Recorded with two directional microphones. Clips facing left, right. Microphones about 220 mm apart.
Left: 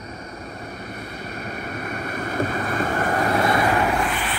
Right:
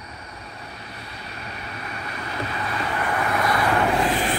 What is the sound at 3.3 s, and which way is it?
Vehicle, 25° left (ahead or behind).